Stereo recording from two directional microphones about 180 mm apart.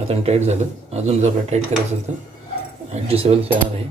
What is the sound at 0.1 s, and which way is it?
Speech, 35° right (ahead or behind).